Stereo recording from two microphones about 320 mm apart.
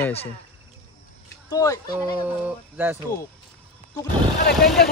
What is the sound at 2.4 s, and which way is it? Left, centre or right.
Speech, centre.